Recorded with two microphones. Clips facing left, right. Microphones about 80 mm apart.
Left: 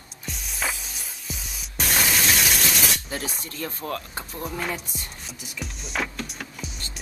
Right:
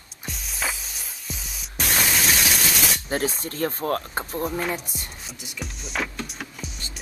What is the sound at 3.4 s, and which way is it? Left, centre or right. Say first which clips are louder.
Speech: right 6 dB; right.